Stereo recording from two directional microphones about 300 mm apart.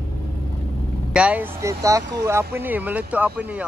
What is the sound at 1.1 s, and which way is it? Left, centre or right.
Speech, centre.